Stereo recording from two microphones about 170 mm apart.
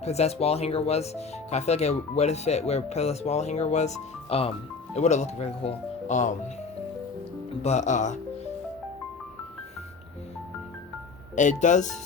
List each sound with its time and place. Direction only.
0.0 s speech: 40° left (ahead or behind)
7.6 s speech: 40° left (ahead or behind)
11.3 s speech: 45° left (ahead or behind)